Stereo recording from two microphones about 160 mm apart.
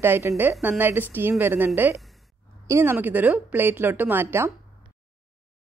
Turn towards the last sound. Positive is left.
turn(degrees=-15)  # may be behind; listen again after turning